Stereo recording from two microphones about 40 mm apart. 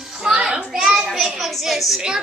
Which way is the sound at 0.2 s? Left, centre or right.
Right.